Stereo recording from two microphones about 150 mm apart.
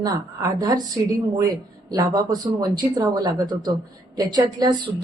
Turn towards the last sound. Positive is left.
turn(degrees=-30)  # may be behind; listen again after turning